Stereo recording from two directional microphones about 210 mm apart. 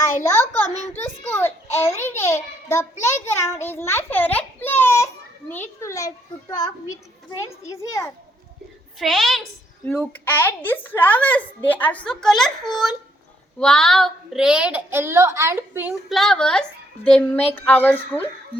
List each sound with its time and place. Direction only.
0.2 s a woman's voice: 10° left (ahead or behind)
9.0 s a woman's voice: centre (ahead or behind)